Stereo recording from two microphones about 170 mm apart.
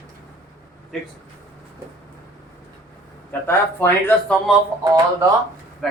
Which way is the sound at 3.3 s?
10° left (ahead or behind).